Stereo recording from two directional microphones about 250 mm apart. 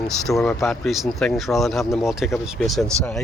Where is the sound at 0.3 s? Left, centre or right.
Centre.